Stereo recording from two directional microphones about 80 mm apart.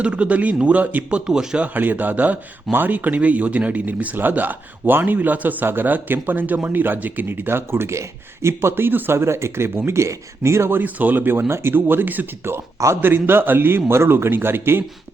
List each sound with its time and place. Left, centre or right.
0.0 s speech: centre
1.3 s speech: centre
1.6 s speech: right